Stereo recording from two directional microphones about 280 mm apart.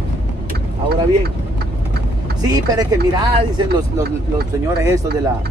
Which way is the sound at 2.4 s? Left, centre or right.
Centre.